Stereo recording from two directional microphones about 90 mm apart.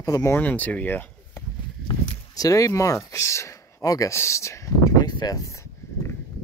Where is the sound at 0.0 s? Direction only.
35° left (ahead or behind).